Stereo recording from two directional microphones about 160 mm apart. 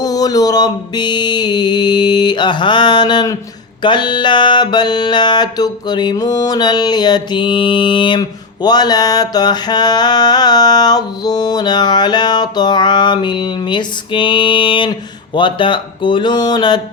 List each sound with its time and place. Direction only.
0.0 s music: 25° left (ahead or behind)